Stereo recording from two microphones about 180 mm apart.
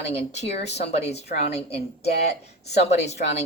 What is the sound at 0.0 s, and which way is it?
A woman's voice, 35° left (ahead or behind).